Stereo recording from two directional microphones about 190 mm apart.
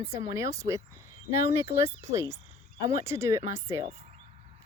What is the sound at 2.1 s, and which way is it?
Speech, 15° right (ahead or behind).